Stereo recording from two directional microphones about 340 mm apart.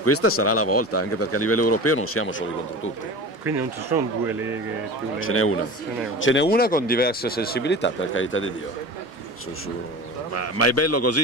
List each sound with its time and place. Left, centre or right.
0.0 s speech: left
3.4 s speech: centre
5.2 s speech: left
10.3 s a man's voice: left